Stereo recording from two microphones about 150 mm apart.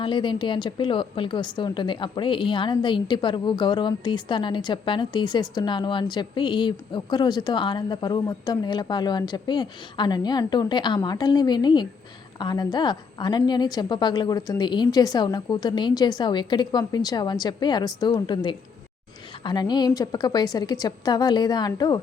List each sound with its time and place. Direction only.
0.0 s a woman's voice: 30° left (ahead or behind)